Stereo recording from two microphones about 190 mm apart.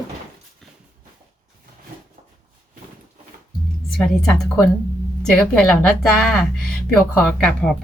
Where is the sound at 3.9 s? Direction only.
Centre (ahead or behind).